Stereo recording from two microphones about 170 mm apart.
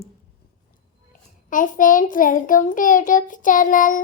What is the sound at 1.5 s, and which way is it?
Child singing, 50° left (ahead or behind).